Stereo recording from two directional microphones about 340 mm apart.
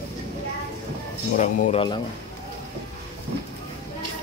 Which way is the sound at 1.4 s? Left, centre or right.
Centre.